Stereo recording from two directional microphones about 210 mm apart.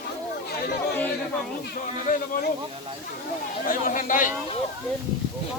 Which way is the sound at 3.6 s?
40° left (ahead or behind).